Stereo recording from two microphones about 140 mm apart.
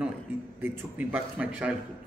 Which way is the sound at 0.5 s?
15° right (ahead or behind).